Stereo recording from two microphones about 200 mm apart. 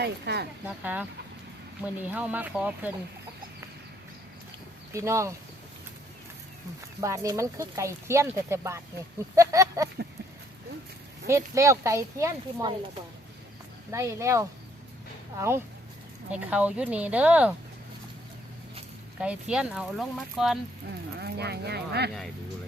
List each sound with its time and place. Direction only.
0.0 s speech: 55° right (ahead or behind)
0.8 s speech: 5° right (ahead or behind)
2.0 s speech: 10° right (ahead or behind)
4.9 s speech: 15° right (ahead or behind)
7.0 s speech: 15° right (ahead or behind)
11.3 s speech: 15° right (ahead or behind)
13.9 s speech: 15° right (ahead or behind)
19.2 s speech: 5° right (ahead or behind)
21.2 s speech: 55° right (ahead or behind)